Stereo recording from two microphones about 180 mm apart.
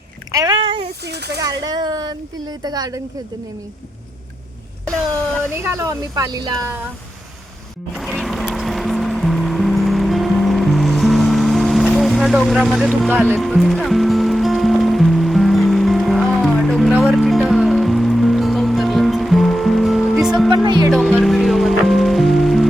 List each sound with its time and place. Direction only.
0.3 s a sound: 20° right (ahead or behind)
1.0 s speech: 65° right (ahead or behind)
1.6 s speech: 25° right (ahead or behind)
5.6 s speech: 15° right (ahead or behind)
7.9 s music: centre (ahead or behind)